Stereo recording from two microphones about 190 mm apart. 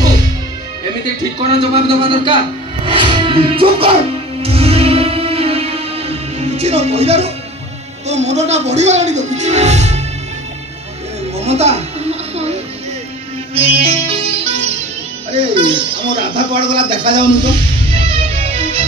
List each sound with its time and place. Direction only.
1.7 s speech: 25° right (ahead or behind)
4.4 s music: 30° right (ahead or behind)
8.1 s speech: 35° right (ahead or behind)
11.3 s music: 35° right (ahead or behind)
13.6 s music: 30° right (ahead or behind)